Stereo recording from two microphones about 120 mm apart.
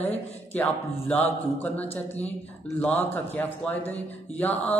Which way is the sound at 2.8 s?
15° left (ahead or behind).